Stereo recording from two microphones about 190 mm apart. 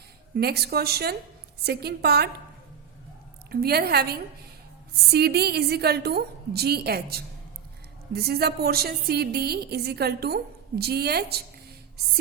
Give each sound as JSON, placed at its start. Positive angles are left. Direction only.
{"t": 0.3, "sound": "a woman's voice", "side_deg": -55}
{"t": 3.5, "sound": "a woman's voice", "side_deg": -55}